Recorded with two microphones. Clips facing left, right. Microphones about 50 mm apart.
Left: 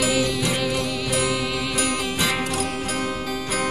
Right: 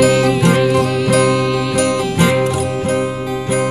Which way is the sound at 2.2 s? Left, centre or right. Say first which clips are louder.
Right 11 dB; right.